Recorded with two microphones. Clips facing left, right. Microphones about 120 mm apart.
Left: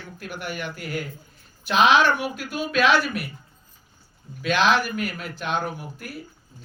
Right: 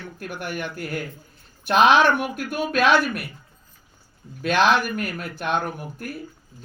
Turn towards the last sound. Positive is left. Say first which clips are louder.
# right 1 dB
turn(degrees=-50)  # may be behind; listen again after turning